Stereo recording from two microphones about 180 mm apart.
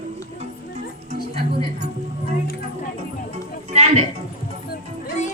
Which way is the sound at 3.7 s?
35° right (ahead or behind).